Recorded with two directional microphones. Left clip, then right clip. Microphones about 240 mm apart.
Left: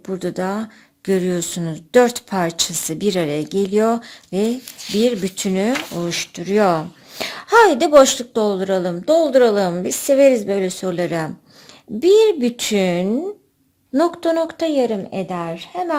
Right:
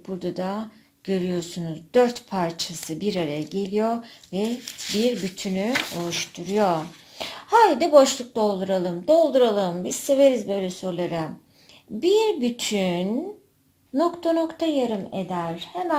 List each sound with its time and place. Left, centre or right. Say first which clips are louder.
0.0 s speech: left 6 dB; left
4.8 s speech: right 2 dB; centre
5.4 s speech: left 6 dB; left